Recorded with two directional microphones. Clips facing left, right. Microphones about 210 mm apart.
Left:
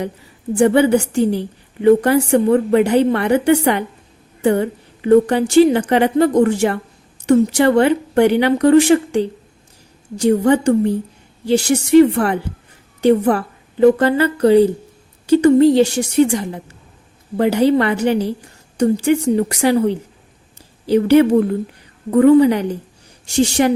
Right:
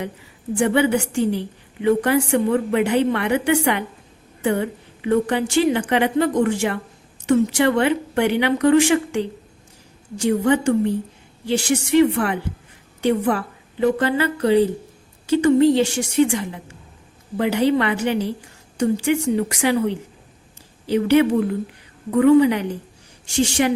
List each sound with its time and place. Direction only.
0.5 s a woman's voice: 40° left (ahead or behind)